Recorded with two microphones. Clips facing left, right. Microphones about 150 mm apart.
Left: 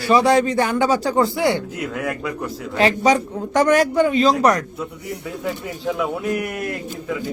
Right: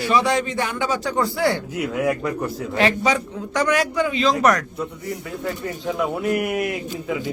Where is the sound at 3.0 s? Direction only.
45° left (ahead or behind).